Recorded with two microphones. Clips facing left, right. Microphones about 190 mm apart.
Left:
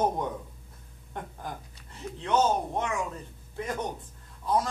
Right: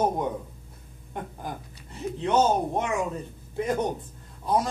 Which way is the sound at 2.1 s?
20° right (ahead or behind).